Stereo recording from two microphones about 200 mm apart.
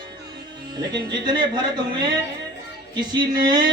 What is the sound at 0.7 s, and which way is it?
Speech, 20° right (ahead or behind).